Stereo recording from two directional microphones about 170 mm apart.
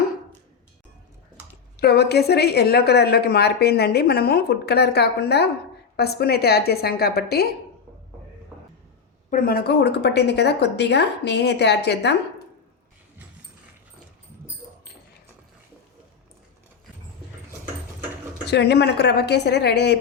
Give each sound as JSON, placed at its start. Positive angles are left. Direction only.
{"t": 1.7, "sound": "a woman's voice", "side_deg": 70}
{"t": 9.3, "sound": "a woman's voice", "side_deg": 65}
{"t": 18.4, "sound": "a woman's voice", "side_deg": 75}